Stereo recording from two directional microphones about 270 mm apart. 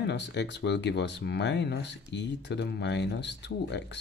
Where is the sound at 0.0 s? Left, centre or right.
Left.